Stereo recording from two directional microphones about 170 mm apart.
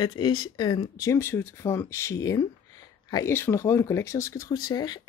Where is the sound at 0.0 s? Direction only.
25° left (ahead or behind).